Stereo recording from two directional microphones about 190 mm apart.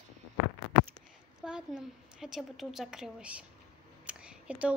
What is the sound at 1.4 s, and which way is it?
Speech, 5° right (ahead or behind).